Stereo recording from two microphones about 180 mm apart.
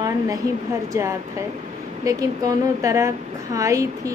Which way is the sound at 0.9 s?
15° right (ahead or behind).